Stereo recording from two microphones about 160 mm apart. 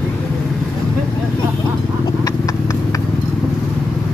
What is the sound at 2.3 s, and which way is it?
Clip-clop, 20° left (ahead or behind).